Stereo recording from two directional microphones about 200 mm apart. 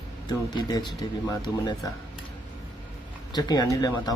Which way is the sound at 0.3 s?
20° left (ahead or behind).